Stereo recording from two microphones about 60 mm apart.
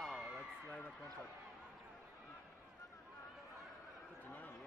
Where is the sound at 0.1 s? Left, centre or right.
Centre.